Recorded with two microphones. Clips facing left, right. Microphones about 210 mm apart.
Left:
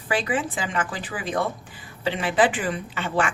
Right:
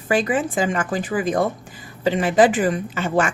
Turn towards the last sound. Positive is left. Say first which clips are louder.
# right 4 dB
turn(degrees=-45)  # may be behind; listen again after turning